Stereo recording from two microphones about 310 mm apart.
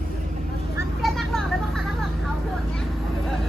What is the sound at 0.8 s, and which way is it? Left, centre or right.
Vehicle, centre.